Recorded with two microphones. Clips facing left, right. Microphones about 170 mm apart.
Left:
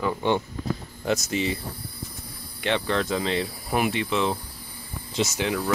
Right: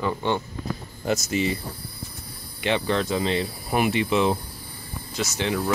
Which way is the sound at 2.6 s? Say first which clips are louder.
Right 1 dB; 5° right (ahead or behind).